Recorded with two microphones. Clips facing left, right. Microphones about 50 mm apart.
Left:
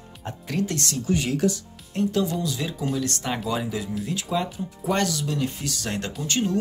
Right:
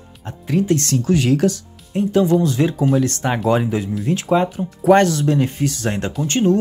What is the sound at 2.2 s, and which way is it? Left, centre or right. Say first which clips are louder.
Speech: right 12 dB; right.